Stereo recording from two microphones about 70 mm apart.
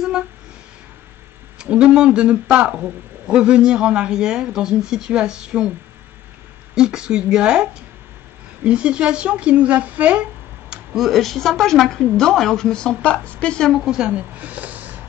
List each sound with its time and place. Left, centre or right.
1.6 s a man's voice: centre
6.7 s a man's voice: centre
8.6 s a man's voice: centre
11.0 s a woman's voice: centre
13.7 s a man's voice: centre
14.3 s speech: right